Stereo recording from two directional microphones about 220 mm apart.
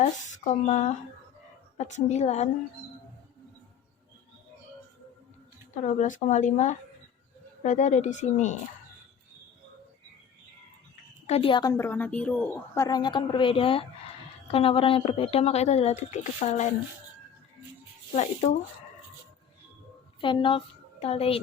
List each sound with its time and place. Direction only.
0.0 s speech: 30° left (ahead or behind)
5.7 s speech: 35° left (ahead or behind)
11.3 s a woman's voice: 25° left (ahead or behind)
18.1 s speech: 30° left (ahead or behind)
20.2 s speech: 20° left (ahead or behind)